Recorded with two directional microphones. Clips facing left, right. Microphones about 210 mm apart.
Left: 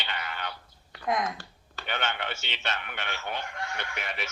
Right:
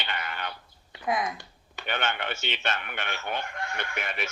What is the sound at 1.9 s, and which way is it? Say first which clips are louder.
Speech: right 2 dB; 50° right (ahead or behind).